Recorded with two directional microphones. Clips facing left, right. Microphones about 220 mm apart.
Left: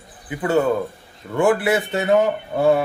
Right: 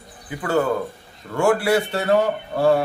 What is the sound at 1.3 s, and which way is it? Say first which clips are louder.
Speech: even; 20° left (ahead or behind).